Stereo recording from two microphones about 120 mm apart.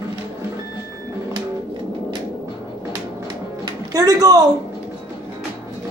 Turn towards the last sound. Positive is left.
turn(degrees=-30)  # may be behind; listen again after turning